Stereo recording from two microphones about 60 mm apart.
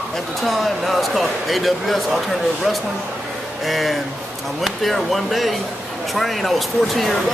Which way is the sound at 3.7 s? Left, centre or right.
Centre.